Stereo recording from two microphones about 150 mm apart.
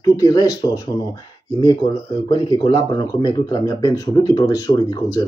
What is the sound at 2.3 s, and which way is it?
Speech, 30° left (ahead or behind).